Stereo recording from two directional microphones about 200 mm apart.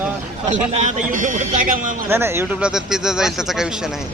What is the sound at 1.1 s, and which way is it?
Speech, 40° right (ahead or behind).